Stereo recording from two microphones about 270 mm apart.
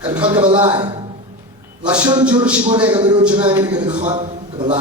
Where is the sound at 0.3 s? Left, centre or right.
Centre.